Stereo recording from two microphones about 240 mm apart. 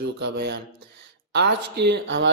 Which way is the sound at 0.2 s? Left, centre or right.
Right.